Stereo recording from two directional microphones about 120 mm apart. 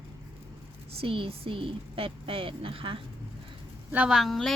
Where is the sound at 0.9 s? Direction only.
50° right (ahead or behind).